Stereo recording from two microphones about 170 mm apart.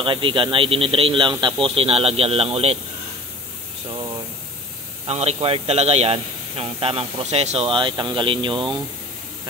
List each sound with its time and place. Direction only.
0.0 s a man's voice: 30° right (ahead or behind)
5.0 s a man's voice: 40° right (ahead or behind)